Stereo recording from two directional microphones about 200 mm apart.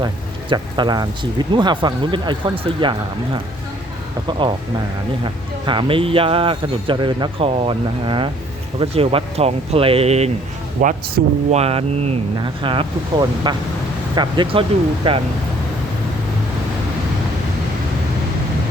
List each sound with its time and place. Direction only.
0.5 s speech: 20° right (ahead or behind)
4.3 s speech: 25° right (ahead or behind)